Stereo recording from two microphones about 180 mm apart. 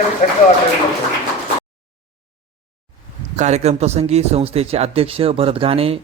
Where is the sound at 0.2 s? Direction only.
45° left (ahead or behind).